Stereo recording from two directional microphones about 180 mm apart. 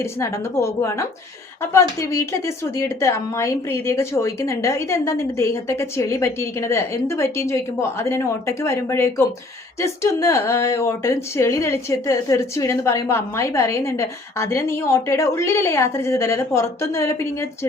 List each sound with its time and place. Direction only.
0.0 s a woman's voice: 15° left (ahead or behind)